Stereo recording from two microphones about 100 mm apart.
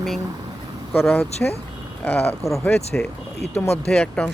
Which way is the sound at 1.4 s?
15° left (ahead or behind).